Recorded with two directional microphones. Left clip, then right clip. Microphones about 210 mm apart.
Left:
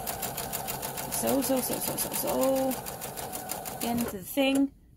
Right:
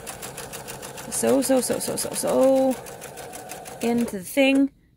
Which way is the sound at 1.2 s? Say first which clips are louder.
Right 8 dB; 55° right (ahead or behind).